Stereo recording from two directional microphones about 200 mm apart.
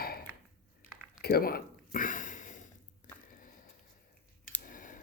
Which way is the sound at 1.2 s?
50° left (ahead or behind).